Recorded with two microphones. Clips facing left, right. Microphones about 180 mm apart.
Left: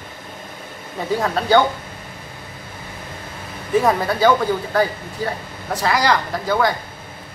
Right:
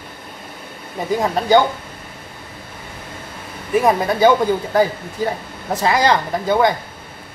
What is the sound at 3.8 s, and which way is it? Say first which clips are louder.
Speech: right 2 dB; 15° right (ahead or behind).